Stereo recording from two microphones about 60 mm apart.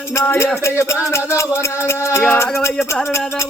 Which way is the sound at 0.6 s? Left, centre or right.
Left.